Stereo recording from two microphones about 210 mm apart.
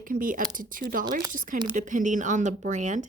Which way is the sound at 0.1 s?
40° right (ahead or behind).